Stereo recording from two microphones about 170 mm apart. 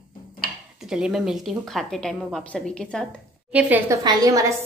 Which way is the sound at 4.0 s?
20° right (ahead or behind).